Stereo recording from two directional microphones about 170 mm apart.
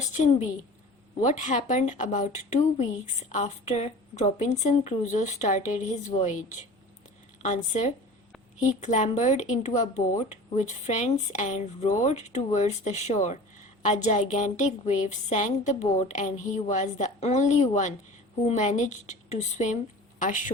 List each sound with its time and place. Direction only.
0.1 s a woman's voice: 45° left (ahead or behind)